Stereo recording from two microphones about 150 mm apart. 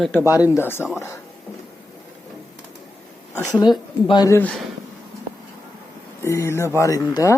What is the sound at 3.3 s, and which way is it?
A woman's voice, 25° left (ahead or behind).